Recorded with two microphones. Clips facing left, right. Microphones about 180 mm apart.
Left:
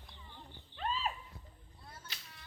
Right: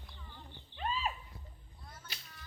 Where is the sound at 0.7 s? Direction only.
5° right (ahead or behind).